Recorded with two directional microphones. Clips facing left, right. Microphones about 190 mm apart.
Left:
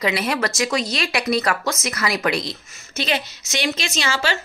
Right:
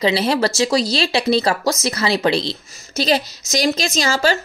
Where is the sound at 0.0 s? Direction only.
30° right (ahead or behind).